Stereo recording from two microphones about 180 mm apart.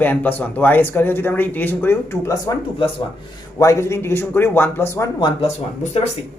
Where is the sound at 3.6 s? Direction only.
15° left (ahead or behind).